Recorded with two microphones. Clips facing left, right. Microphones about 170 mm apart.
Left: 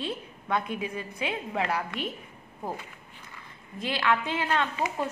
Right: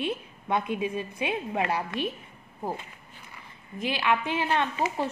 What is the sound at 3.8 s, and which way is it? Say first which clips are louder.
A woman's voice: right 1 dB; 15° right (ahead or behind).